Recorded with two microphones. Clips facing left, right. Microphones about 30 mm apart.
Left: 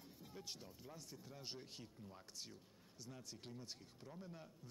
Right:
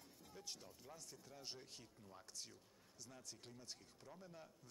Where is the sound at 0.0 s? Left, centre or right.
Centre.